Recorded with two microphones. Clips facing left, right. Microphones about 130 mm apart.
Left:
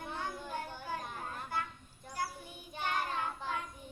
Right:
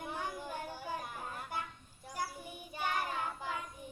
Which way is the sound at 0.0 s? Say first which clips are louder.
Even; 15° right (ahead or behind).